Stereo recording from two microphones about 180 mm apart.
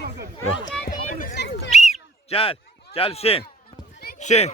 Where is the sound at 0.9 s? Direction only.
45° left (ahead or behind).